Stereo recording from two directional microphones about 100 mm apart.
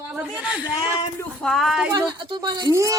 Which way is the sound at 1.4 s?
Centre (ahead or behind).